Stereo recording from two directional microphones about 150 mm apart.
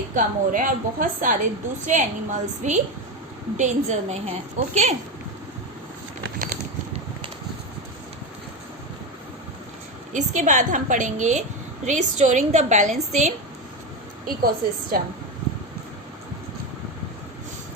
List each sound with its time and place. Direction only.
0.1 s a woman's voice: 60° right (ahead or behind)
10.1 s a woman's voice: 55° right (ahead or behind)
14.3 s a woman's voice: 75° right (ahead or behind)